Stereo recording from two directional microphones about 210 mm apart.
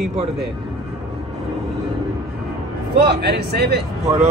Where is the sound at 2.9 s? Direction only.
50° right (ahead or behind).